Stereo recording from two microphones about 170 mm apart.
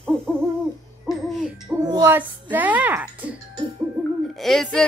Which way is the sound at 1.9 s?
15° right (ahead or behind).